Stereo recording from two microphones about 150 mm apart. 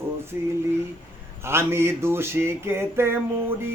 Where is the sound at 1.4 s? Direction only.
15° right (ahead or behind).